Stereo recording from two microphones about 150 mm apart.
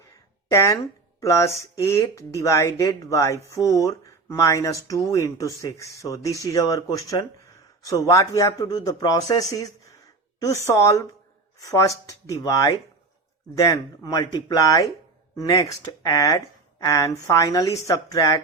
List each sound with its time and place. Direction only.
0.5 s speech: 20° left (ahead or behind)